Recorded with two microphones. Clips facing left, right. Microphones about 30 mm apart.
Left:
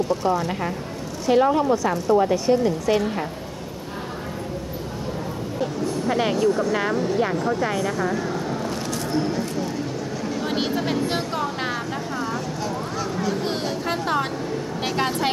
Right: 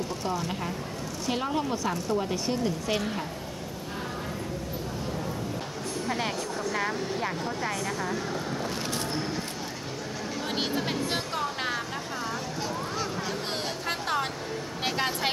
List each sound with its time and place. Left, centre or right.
0.2 s speech: centre
2.3 s speech: centre
5.6 s speech: centre
8.4 s vehicle: centre
9.1 s a sound: centre
12.5 s a sound: centre
13.3 s speech: centre